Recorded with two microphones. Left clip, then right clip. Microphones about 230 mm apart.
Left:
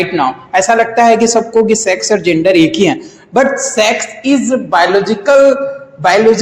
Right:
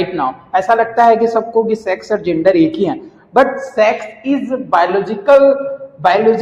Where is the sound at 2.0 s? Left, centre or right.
Left.